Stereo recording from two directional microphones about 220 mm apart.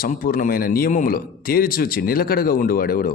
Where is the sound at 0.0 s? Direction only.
40° left (ahead or behind).